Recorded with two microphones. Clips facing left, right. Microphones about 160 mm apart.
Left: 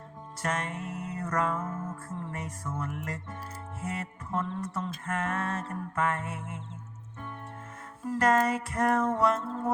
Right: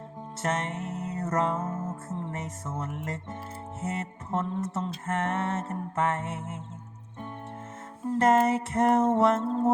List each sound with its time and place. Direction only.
0.4 s music: 25° right (ahead or behind)
8.0 s music: 25° right (ahead or behind)